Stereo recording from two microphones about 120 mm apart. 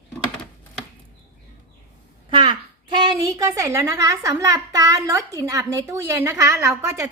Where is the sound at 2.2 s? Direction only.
45° right (ahead or behind); by 7.1 s 25° right (ahead or behind).